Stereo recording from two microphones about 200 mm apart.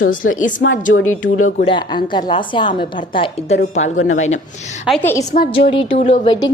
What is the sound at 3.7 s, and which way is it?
Speech, 35° left (ahead or behind).